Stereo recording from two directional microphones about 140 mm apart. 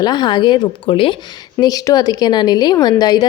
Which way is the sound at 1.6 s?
25° left (ahead or behind).